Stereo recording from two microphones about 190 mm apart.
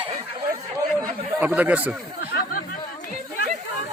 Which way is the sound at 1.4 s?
10° right (ahead or behind).